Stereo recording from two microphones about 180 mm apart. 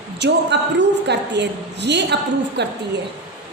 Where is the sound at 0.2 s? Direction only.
75° right (ahead or behind).